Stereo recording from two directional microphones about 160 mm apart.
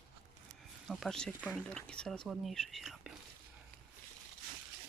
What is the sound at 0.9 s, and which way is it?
Speech, centre (ahead or behind).